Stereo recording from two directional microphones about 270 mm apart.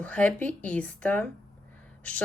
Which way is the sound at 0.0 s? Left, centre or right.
Centre.